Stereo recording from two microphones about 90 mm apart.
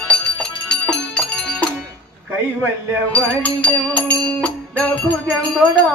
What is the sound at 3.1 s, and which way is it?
Music, 15° left (ahead or behind).